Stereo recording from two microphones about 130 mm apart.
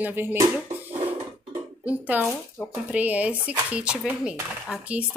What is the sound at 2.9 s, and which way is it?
Speech, 10° right (ahead or behind).